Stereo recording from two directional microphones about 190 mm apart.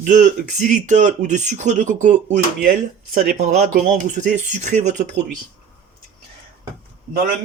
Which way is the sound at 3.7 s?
40° right (ahead or behind).